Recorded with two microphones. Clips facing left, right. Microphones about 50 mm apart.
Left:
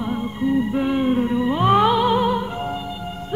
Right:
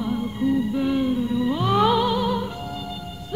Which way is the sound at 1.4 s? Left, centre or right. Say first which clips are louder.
Left 3 dB; left.